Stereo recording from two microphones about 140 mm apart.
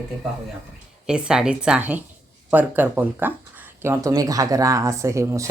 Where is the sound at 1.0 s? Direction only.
5° right (ahead or behind).